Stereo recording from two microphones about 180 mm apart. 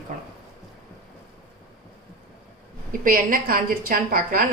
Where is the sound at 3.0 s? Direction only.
50° right (ahead or behind).